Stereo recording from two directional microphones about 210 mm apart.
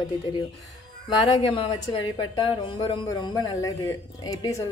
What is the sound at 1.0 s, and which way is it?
A woman's voice, 25° left (ahead or behind).